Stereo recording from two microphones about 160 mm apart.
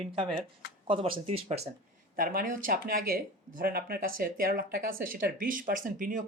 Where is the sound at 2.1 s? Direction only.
65° right (ahead or behind).